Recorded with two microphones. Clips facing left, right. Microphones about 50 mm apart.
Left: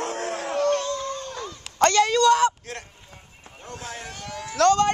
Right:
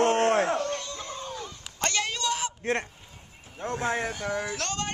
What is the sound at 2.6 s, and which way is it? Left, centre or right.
Speech, right.